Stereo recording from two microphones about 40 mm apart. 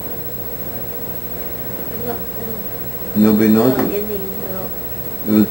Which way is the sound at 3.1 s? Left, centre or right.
Centre.